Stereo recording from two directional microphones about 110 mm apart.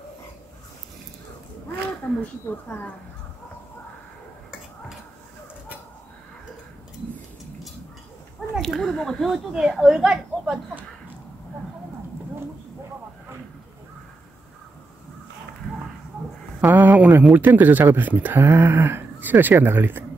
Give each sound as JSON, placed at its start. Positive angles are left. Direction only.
{"t": 8.5, "sound": "speech", "side_deg": 5}
{"t": 16.6, "sound": "a man's voice", "side_deg": -15}